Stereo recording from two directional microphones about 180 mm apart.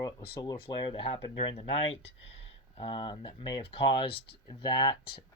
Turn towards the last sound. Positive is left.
turn(degrees=25)  # may be behind; listen again after turning